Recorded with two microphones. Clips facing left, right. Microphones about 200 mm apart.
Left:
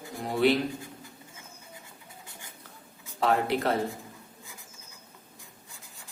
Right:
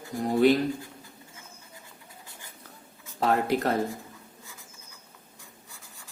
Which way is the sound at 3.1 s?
45° right (ahead or behind).